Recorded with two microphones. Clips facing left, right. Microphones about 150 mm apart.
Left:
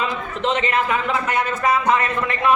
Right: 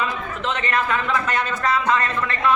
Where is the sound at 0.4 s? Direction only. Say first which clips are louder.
Left 3 dB; 15° left (ahead or behind).